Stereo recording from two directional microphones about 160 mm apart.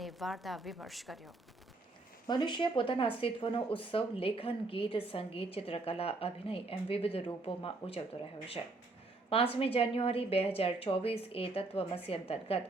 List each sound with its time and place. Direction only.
0.0 s a woman's voice: centre (ahead or behind)
2.2 s speech: 25° left (ahead or behind)
9.3 s speech: 35° left (ahead or behind)